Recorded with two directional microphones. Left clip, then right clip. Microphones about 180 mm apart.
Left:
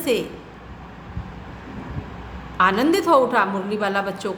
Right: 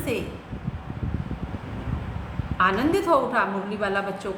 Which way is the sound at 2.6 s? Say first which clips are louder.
Left 4 dB; 45° left (ahead or behind).